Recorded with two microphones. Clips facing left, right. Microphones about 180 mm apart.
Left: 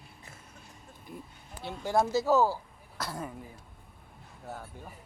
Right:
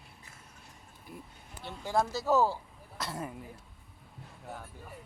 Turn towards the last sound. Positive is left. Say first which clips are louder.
# left 1 dB
turn(degrees=-5)  # may be behind; listen again after turning